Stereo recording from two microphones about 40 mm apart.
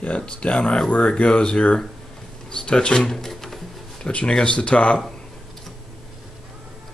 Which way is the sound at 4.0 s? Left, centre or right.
Left.